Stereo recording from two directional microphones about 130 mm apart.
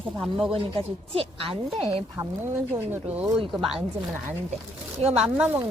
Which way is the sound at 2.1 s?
25° right (ahead or behind).